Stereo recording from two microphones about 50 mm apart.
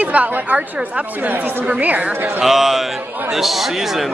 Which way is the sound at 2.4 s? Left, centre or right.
Centre.